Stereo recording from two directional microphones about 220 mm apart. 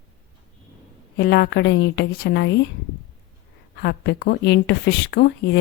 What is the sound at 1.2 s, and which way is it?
Speech, 50° left (ahead or behind).